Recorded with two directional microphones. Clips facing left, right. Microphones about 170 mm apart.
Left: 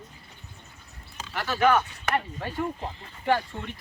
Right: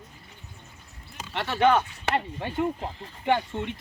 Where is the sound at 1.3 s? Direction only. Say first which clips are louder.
Right 1 dB; 25° right (ahead or behind).